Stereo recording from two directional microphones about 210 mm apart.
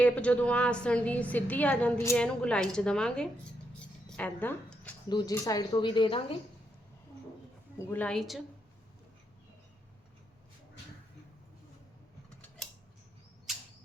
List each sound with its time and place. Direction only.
0.0 s a woman's voice: 5° left (ahead or behind)
3.8 s a sound: 5° left (ahead or behind)
5.0 s speech: 20° left (ahead or behind)
7.8 s a woman's voice: 10° left (ahead or behind)